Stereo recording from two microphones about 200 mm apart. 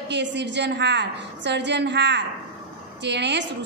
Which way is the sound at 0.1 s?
60° right (ahead or behind).